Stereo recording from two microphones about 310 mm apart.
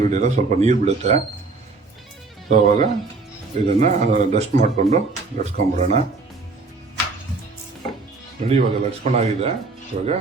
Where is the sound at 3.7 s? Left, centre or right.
Right.